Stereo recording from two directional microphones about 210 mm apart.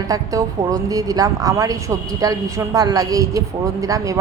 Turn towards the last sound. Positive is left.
turn(degrees=-15)  # may be behind; listen again after turning